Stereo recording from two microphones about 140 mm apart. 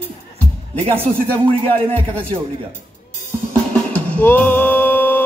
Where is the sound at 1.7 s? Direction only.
10° left (ahead or behind).